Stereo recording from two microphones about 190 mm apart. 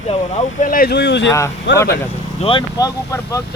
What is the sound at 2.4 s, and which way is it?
Speech, 25° left (ahead or behind).